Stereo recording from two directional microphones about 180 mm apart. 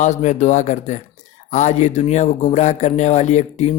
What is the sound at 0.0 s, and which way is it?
Speech, 40° left (ahead or behind).